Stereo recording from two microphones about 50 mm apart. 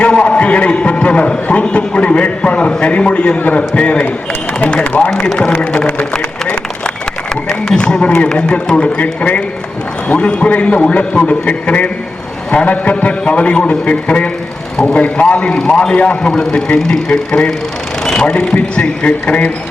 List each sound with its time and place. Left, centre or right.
0.0 s a man's voice: left
7.6 s a man's voice: centre